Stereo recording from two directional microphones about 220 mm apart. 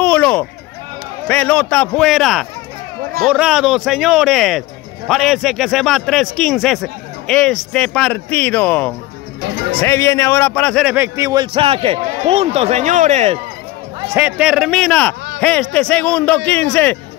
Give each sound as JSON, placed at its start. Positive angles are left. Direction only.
{"t": 0.0, "sound": "a sound", "side_deg": 5}
{"t": 1.2, "sound": "a man's voice", "side_deg": 5}
{"t": 14.1, "sound": "a man's voice", "side_deg": -5}